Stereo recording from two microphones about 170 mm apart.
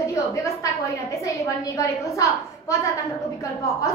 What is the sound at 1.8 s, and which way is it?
A woman's voice, 20° left (ahead or behind).